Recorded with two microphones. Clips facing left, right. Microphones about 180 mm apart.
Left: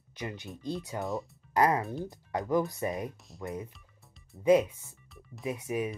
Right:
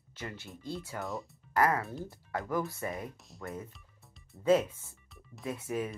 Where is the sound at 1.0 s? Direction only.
Centre (ahead or behind).